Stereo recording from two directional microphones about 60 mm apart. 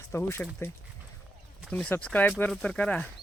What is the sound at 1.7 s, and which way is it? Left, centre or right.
Speech, left.